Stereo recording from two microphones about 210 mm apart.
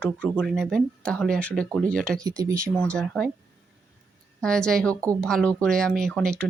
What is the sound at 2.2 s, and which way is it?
Speech, 15° right (ahead or behind).